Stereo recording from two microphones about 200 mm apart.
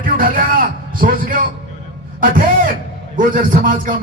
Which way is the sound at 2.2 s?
45° right (ahead or behind).